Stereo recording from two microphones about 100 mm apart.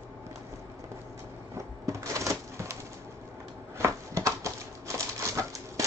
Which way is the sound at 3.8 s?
30° right (ahead or behind).